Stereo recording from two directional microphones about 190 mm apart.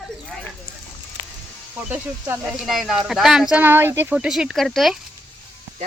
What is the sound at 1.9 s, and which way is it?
Speech, 5° right (ahead or behind).